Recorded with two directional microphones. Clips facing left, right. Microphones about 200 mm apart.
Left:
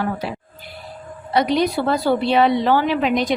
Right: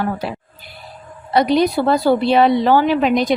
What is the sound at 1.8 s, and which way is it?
A woman's voice, 40° right (ahead or behind).